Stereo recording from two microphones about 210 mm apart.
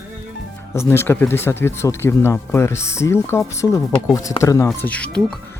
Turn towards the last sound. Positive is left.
turn(degrees=5)  # may be behind; listen again after turning